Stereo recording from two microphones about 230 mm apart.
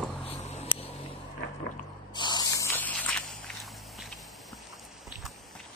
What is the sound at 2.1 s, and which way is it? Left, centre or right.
Walk, centre.